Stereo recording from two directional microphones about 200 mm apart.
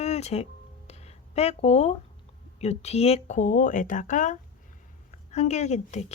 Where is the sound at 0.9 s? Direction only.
30° left (ahead or behind).